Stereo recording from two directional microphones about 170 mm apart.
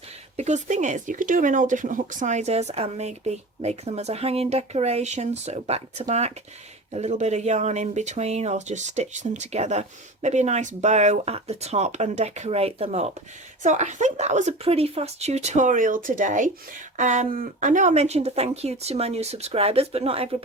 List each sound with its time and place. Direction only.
0.3 s speech: 45° right (ahead or behind)